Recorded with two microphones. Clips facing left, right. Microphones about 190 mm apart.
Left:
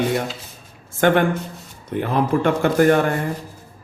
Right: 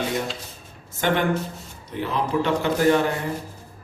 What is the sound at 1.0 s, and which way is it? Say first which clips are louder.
Speech: left 5 dB; 55° left (ahead or behind).